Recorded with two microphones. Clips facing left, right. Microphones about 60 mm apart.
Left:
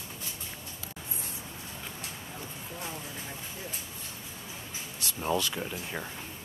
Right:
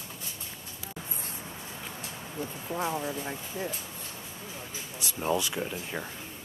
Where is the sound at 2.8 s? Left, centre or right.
Right.